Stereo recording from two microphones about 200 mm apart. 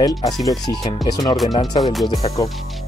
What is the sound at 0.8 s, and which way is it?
Speech, 20° left (ahead or behind).